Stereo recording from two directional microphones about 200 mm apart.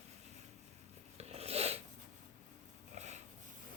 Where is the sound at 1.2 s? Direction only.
30° right (ahead or behind).